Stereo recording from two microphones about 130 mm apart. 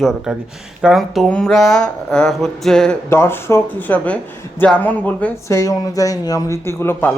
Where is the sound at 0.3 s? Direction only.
5° right (ahead or behind).